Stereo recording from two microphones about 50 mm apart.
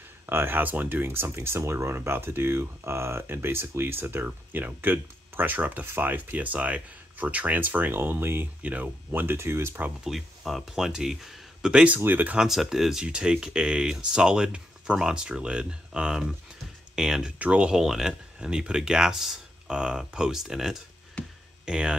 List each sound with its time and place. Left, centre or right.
0.3 s speech: right
7.9 s speech: right
8.6 s speech: right
10.0 s speech: centre
11.7 s speech: right
12.0 s speech: right
12.4 s speech: centre
13.0 s speech: centre
17.4 s speech: right
17.6 s speech: centre
21.2 s a sound: left
21.6 s speech: centre